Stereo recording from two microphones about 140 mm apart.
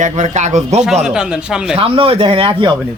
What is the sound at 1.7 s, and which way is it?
Speech, 40° right (ahead or behind).